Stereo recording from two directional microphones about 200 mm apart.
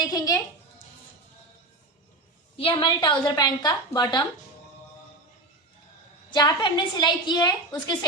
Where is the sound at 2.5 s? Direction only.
25° left (ahead or behind).